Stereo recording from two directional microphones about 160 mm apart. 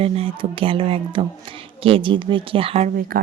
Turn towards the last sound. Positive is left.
turn(degrees=-60)  # may be behind; listen again after turning